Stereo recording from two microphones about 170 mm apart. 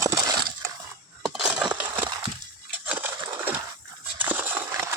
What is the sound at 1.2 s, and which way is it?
Crushing, 5° right (ahead or behind).